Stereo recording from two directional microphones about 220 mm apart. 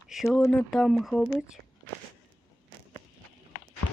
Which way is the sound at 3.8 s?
90° left.